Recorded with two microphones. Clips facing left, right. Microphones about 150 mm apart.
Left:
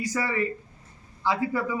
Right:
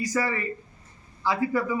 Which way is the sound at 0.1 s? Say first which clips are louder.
Right 3 dB; 10° left (ahead or behind).